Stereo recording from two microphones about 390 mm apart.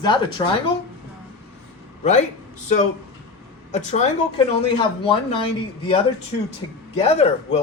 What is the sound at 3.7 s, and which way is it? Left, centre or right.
Speech, centre.